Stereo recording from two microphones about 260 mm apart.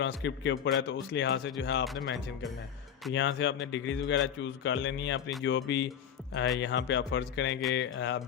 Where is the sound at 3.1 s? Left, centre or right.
Left.